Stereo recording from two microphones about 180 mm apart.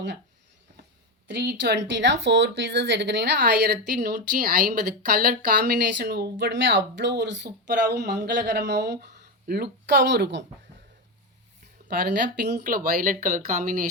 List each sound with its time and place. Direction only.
1.4 s speech: 65° right (ahead or behind); by 7.3 s 85° right
7.7 s speech: 70° right (ahead or behind)
11.9 s speech: 70° right (ahead or behind)
12.6 s speech: 50° right (ahead or behind)